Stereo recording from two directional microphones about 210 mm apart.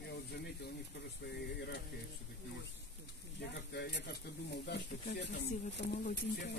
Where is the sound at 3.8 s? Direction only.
55° left (ahead or behind).